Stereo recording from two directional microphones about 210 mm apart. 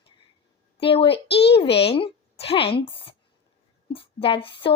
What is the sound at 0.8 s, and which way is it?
Speech, 25° left (ahead or behind).